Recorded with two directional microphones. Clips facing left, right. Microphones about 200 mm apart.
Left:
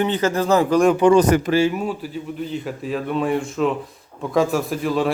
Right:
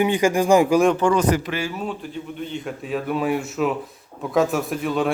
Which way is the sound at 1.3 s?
50° left (ahead or behind).